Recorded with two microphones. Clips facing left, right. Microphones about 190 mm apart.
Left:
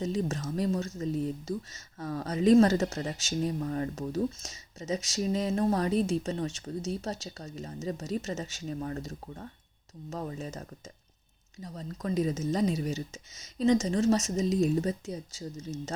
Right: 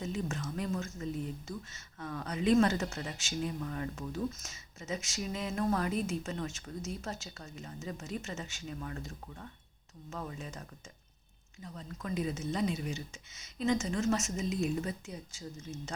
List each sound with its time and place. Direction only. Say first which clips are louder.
0.0 s speech: left 6 dB; 35° left (ahead or behind)